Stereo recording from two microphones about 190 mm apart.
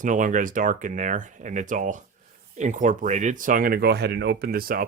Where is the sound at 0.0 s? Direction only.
45° right (ahead or behind).